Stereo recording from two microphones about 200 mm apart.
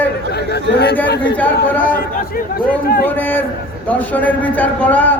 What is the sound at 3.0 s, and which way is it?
A man's voice, 10° left (ahead or behind).